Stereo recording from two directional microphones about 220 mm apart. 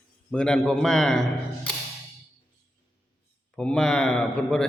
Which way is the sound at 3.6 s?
5° left (ahead or behind).